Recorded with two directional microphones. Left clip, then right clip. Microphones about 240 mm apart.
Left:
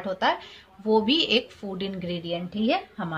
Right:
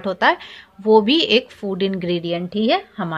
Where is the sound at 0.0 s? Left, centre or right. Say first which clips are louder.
Right 7 dB; right.